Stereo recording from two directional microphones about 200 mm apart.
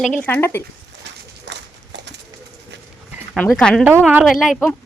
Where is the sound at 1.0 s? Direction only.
60° right (ahead or behind).